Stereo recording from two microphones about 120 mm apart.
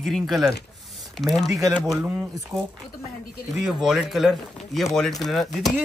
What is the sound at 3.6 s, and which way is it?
Speech, 5° right (ahead or behind).